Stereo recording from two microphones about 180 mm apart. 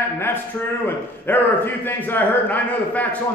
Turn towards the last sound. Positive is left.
turn(degrees=10)  # may be behind; listen again after turning